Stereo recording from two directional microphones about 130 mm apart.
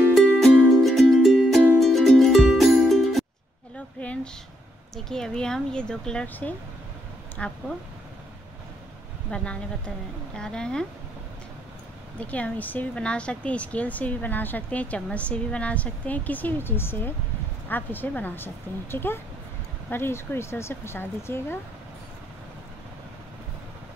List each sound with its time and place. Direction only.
0.1 s music: centre (ahead or behind)
3.7 s a sound: 10° left (ahead or behind)
4.9 s speech: 5° left (ahead or behind)
9.3 s speech: 10° left (ahead or behind)
12.2 s speech: 10° left (ahead or behind)